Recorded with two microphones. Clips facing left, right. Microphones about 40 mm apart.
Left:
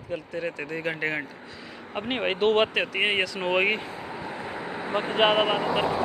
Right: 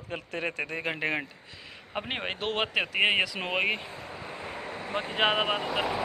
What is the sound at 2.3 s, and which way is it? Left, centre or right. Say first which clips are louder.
Speech: left 10 dB; centre.